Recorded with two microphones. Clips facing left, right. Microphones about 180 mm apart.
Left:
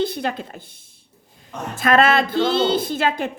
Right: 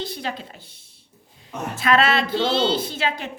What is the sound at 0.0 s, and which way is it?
A woman's voice, 55° left (ahead or behind).